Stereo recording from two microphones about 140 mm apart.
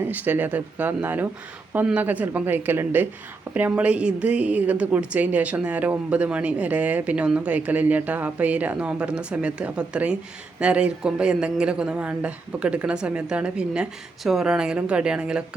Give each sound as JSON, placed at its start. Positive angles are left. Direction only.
{"t": 0.1, "sound": "a woman's voice", "side_deg": -10}